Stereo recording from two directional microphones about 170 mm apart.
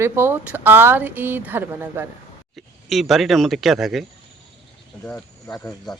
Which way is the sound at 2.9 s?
Centre (ahead or behind).